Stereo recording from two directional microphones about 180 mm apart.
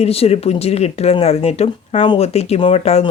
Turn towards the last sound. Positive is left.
turn(degrees=35)  # may be behind; listen again after turning